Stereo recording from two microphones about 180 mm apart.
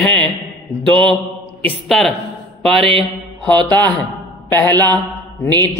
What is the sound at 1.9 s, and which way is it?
Speech, centre (ahead or behind).